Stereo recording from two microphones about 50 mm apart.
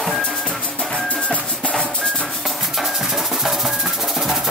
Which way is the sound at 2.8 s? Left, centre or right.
Centre.